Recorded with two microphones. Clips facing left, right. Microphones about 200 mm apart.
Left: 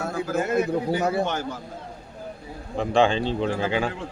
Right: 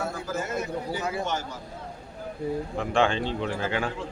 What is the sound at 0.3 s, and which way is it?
A man's voice, 60° left (ahead or behind).